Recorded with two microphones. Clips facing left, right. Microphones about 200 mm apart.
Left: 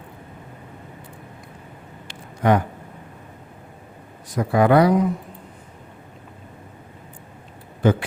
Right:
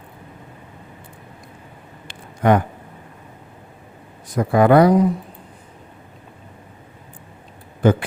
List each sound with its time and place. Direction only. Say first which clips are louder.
2.0 s a sound: right 2 dB; 55° right (ahead or behind)
4.4 s speech: right 3 dB; 50° right (ahead or behind)
7.8 s speech: right 2 dB; 50° right (ahead or behind)